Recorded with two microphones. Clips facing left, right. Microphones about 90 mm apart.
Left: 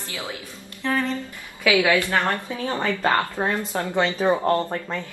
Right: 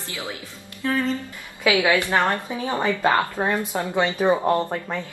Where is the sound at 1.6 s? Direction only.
20° right (ahead or behind).